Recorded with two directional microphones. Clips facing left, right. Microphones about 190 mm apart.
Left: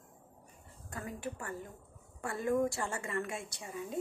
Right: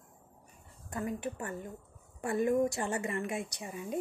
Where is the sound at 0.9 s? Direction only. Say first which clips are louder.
Right 5 dB; 20° right (ahead or behind).